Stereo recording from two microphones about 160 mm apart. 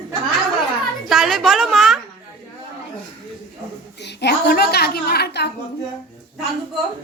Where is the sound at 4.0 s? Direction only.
90° left.